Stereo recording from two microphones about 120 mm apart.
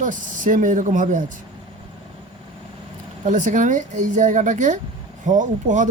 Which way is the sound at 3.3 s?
90° right.